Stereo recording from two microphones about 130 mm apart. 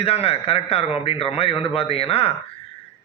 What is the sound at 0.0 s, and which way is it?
A man's voice, 50° left (ahead or behind).